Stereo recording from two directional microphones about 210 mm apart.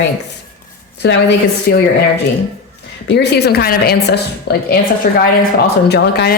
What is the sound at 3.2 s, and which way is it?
A woman's voice, 50° left (ahead or behind).